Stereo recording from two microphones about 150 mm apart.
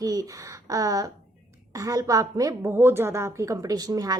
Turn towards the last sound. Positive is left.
turn(degrees=-25)  # may be behind; listen again after turning